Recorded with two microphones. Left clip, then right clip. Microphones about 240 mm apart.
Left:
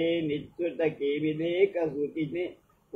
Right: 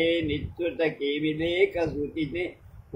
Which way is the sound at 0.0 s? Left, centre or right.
Right.